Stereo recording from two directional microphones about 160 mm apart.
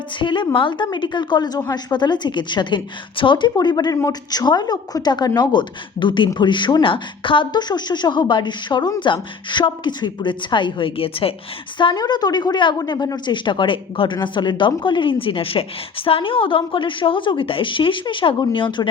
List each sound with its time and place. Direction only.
0.2 s a woman's voice: 30° left (ahead or behind)